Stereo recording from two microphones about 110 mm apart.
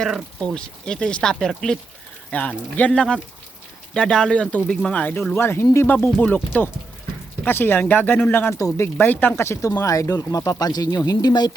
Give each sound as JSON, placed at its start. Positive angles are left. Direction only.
{"t": 0.0, "sound": "speech", "side_deg": 5}